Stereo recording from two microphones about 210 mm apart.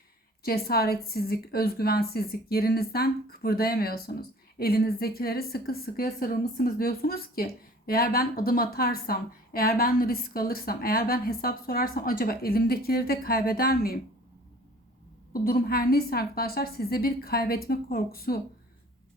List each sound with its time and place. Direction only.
0.4 s a woman's voice: 50° left (ahead or behind)
15.3 s a woman's voice: 45° left (ahead or behind)